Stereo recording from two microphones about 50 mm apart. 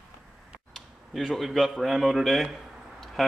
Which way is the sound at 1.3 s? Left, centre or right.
Centre.